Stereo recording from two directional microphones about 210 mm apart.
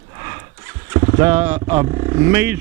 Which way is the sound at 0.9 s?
15° right (ahead or behind).